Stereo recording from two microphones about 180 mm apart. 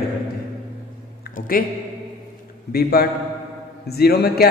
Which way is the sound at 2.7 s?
60° left (ahead or behind).